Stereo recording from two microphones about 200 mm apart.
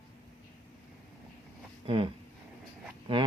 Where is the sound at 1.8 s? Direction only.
25° right (ahead or behind).